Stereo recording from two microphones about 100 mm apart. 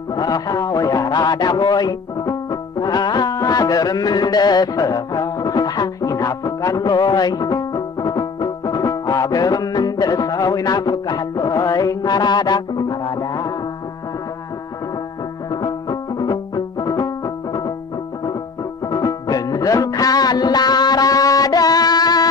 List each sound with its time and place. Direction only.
0.1 s speech: 40° left (ahead or behind)
15.5 s music: 40° left (ahead or behind)
18.9 s music: 40° left (ahead or behind)